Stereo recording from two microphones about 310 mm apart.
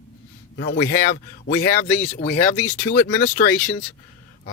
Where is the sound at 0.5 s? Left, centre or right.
Left.